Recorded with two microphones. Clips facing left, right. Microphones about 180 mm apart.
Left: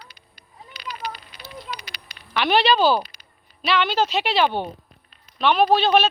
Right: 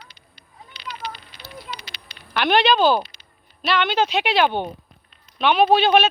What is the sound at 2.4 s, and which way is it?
A woman's voice, centre (ahead or behind).